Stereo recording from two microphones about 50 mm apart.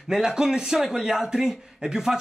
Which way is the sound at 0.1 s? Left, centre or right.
Centre.